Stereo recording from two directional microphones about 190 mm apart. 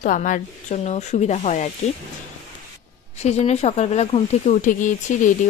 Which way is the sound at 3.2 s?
35° left (ahead or behind).